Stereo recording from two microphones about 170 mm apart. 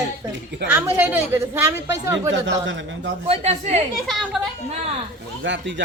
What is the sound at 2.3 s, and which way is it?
Speech, 90° right.